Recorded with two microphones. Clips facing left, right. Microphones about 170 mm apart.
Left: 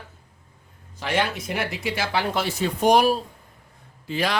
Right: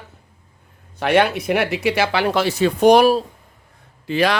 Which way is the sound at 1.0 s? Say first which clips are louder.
Right 8 dB; 65° right (ahead or behind).